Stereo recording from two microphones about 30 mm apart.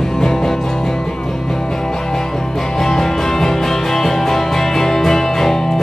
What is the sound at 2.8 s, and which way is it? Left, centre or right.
Music, centre.